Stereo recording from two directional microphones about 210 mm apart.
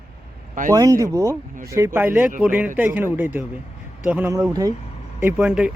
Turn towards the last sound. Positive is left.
turn(degrees=-5)  # may be behind; listen again after turning